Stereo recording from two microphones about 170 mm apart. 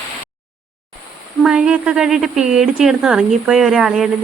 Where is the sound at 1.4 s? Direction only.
5° right (ahead or behind).